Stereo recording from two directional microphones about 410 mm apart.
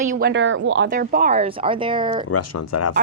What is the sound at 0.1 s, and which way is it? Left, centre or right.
Speech, right.